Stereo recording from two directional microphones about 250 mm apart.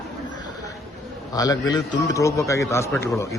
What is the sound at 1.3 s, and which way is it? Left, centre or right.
A man's voice, centre.